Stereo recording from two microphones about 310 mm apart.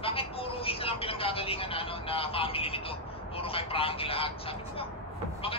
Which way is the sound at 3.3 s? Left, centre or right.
Centre.